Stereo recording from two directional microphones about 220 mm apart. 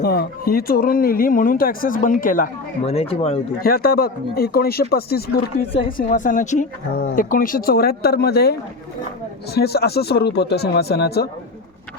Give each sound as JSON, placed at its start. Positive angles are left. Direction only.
{"t": 0.0, "sound": "speech", "side_deg": 45}
{"t": 2.9, "sound": "speech", "side_deg": 25}
{"t": 3.6, "sound": "speech", "side_deg": 45}
{"t": 9.6, "sound": "speech", "side_deg": 45}